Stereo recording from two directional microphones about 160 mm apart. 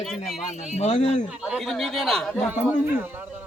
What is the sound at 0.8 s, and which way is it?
Speech, 45° left (ahead or behind).